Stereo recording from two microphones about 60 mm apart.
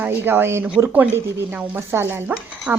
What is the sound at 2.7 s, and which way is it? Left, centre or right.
Speech, right.